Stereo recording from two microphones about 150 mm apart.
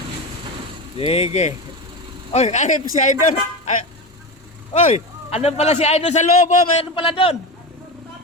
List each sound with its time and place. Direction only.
0.9 s a man's voice: 40° left (ahead or behind); by 3.2 s 55° left (ahead or behind)
4.7 s a man's voice: 50° left (ahead or behind)
6.9 s speech: 35° left (ahead or behind)